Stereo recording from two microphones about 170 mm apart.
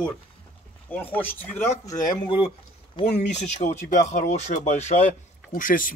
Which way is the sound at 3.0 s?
40° left (ahead or behind).